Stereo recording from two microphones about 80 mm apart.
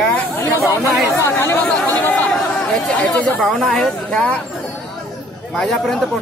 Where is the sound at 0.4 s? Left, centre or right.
Left.